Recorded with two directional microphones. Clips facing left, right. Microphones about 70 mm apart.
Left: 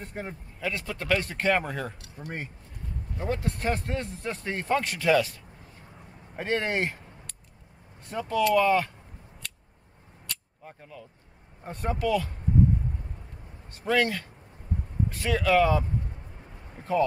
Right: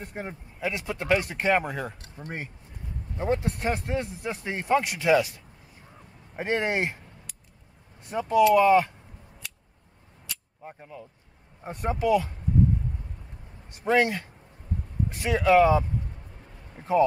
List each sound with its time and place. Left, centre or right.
0.0 s speech: centre
3.2 s speech: right
6.3 s speech: right
8.1 s speech: centre
9.4 s scissors: centre
10.3 s cap gun: centre
10.6 s speech: right
13.7 s speech: right